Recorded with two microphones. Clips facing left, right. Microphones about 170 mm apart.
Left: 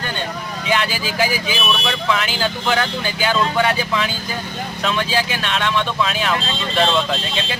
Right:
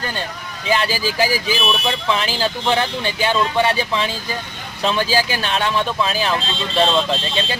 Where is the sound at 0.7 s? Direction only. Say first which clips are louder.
Right 2 dB; 35° right (ahead or behind).